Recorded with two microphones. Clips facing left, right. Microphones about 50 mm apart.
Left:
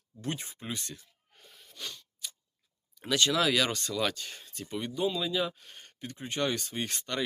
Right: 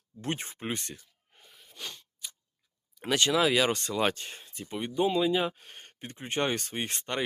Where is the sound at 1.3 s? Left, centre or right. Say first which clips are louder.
Even; centre.